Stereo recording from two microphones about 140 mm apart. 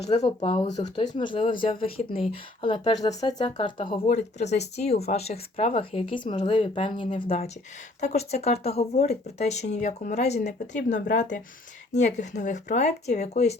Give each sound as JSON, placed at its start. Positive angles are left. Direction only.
{"t": 0.1, "sound": "speech", "side_deg": 30}
{"t": 0.4, "sound": "speech", "side_deg": 40}
{"t": 3.9, "sound": "speech", "side_deg": 55}